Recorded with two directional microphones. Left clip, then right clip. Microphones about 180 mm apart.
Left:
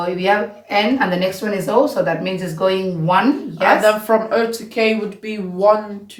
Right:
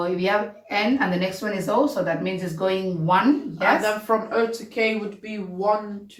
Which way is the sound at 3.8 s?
50° left (ahead or behind).